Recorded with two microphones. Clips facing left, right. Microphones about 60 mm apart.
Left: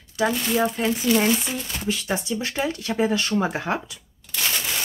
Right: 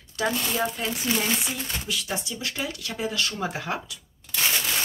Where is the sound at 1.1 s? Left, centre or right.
Right.